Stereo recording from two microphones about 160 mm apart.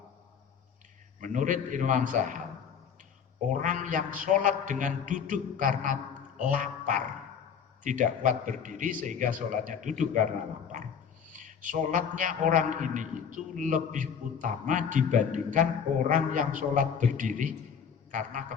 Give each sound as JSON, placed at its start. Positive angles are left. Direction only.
{"t": 1.2, "sound": "a man's voice", "side_deg": -50}
{"t": 3.5, "sound": "a man's voice", "side_deg": -50}
{"t": 11.3, "sound": "a man's voice", "side_deg": -55}